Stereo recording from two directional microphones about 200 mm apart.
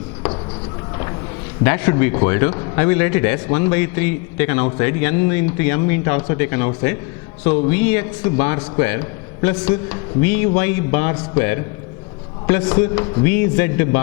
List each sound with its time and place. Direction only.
1.6 s a man's voice: 15° left (ahead or behind)